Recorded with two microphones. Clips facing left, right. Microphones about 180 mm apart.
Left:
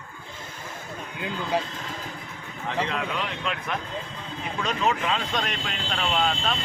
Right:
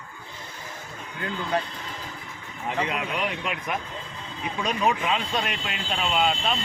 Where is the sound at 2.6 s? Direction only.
15° right (ahead or behind).